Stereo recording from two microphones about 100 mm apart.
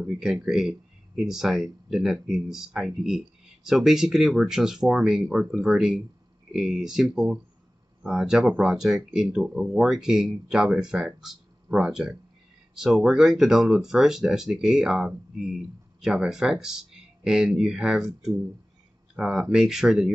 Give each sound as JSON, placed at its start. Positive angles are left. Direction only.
{"t": 0.0, "sound": "speech", "side_deg": -5}